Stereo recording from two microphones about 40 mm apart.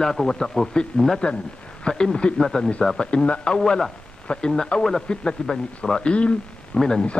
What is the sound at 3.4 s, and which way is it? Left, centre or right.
A man's voice, centre.